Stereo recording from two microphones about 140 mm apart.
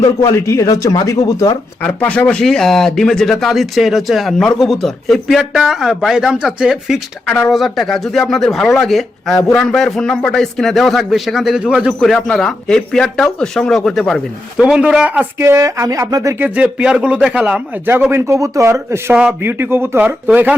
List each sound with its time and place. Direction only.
0.0 s speech: 20° left (ahead or behind); by 11.9 s 5° right (ahead or behind)
11.9 s speech: 5° left (ahead or behind)
15.4 s speech: 20° right (ahead or behind)
16.4 s a man's voice: 10° right (ahead or behind)
18.1 s a man's voice: 25° right (ahead or behind)